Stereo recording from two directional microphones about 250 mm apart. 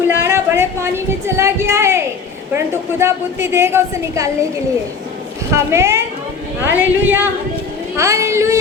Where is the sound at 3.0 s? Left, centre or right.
Centre.